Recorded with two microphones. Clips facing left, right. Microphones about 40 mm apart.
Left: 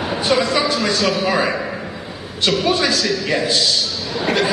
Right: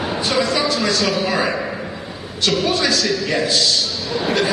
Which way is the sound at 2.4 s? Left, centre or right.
Centre.